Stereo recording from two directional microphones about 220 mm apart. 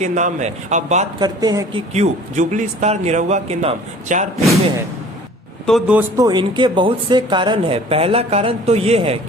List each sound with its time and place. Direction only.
0.0 s a man's voice: 30° right (ahead or behind)
1.2 s speech: 15° right (ahead or behind)
1.9 s a man's voice: 30° right (ahead or behind)
5.6 s speech: 5° right (ahead or behind); by 9.1 s 25° right (ahead or behind)